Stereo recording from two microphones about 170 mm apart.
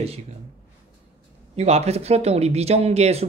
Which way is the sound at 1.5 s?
40° right (ahead or behind).